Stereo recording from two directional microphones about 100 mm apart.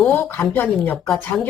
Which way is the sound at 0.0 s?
15° left (ahead or behind).